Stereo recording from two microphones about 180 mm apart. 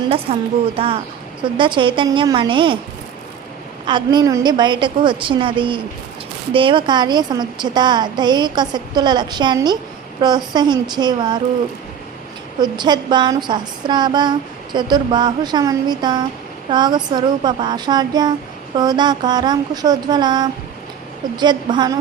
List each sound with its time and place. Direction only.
0.0 s a woman's voice: 30° right (ahead or behind)
3.8 s a woman's voice: 25° right (ahead or behind)
12.5 s a woman's voice: 25° right (ahead or behind)